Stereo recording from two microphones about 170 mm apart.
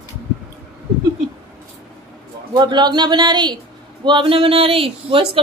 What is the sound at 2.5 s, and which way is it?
A man's voice, 25° right (ahead or behind).